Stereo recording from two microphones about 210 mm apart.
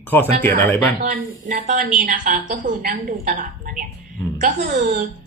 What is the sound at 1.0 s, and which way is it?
A woman's voice, 40° right (ahead or behind).